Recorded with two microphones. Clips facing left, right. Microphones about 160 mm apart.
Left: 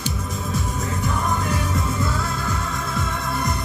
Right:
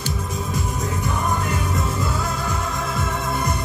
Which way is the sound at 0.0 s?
10° right (ahead or behind).